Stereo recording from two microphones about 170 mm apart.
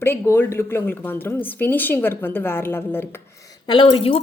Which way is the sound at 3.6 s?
30° left (ahead or behind).